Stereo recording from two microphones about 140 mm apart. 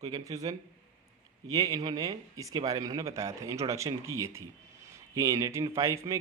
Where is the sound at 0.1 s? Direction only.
25° right (ahead or behind).